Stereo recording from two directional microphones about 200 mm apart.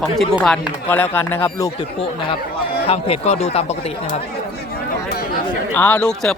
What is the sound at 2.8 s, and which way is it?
Speech, 30° left (ahead or behind).